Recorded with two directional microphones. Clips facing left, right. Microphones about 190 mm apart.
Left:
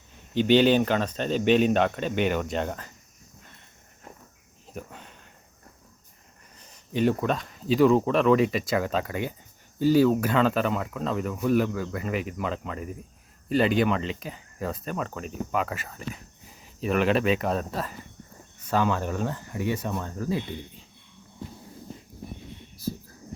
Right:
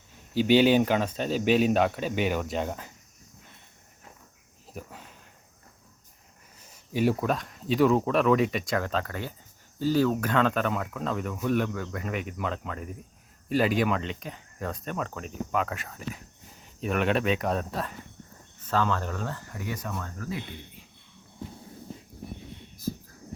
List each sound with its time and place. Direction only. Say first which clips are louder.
0.3 s speech: left 1 dB; 10° right (ahead or behind)
4.6 s a sound: left 2 dB; 5° right (ahead or behind)
6.6 s speech: left 1 dB; 10° right (ahead or behind)
18.6 s speech: left 2 dB; 15° left (ahead or behind); by 20.4 s 30° left (ahead or behind)